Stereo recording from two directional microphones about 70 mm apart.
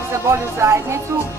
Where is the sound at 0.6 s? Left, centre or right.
Right.